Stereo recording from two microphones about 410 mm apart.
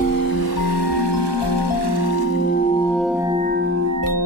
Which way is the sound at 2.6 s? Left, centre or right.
Centre.